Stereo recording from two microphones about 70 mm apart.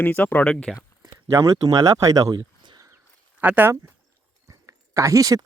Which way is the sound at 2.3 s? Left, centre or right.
Right.